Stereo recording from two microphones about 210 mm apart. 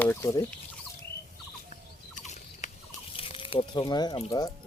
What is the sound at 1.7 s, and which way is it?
Fowl, 35° left (ahead or behind).